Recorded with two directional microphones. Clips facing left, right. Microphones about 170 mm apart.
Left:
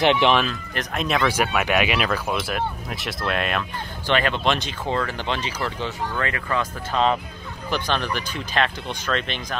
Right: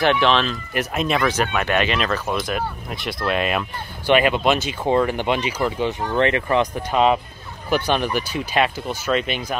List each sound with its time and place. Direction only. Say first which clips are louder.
0.0 s speech: even; 20° left (ahead or behind)
0.5 s speech: right 4 dB; centre (ahead or behind)
6.1 s speech: right 9 dB; 25° right (ahead or behind)